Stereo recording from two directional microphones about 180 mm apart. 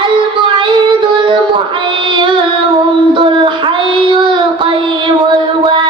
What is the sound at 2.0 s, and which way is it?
Child singing, 25° right (ahead or behind).